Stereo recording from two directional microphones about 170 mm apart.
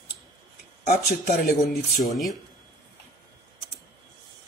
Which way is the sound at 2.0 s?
Centre (ahead or behind).